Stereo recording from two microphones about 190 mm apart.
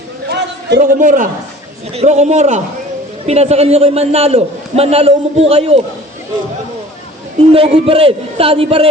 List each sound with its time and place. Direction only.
0.3 s a sound: 60° right (ahead or behind)
0.8 s a man's voice: 45° right (ahead or behind)
7.5 s a man's voice: 30° right (ahead or behind)